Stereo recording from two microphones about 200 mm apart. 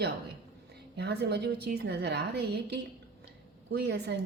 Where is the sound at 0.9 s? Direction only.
55° right (ahead or behind).